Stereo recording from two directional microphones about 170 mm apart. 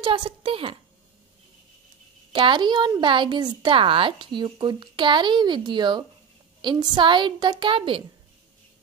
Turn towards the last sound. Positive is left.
turn(degrees=-30)  # may be behind; listen again after turning